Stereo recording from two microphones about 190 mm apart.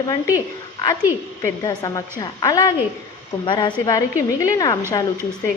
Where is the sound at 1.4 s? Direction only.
20° left (ahead or behind).